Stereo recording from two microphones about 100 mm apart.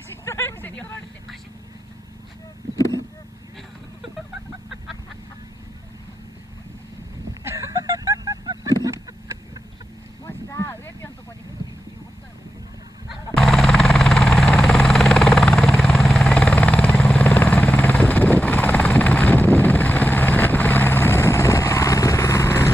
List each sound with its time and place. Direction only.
0.2 s vehicle: 25° left (ahead or behind)
7.4 s a sound: 30° right (ahead or behind)
10.2 s vehicle: 30° left (ahead or behind)
13.1 s vehicle: 5° left (ahead or behind); by 22.7 s 25° left (ahead or behind)